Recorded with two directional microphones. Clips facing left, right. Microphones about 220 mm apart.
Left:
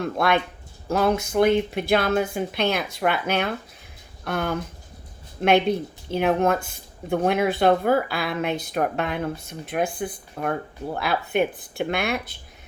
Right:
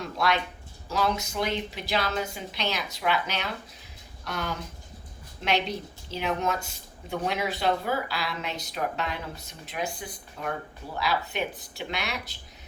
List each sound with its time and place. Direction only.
0.0 s speech: 55° left (ahead or behind)